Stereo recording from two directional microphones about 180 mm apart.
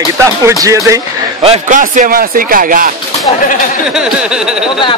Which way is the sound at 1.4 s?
40° right (ahead or behind).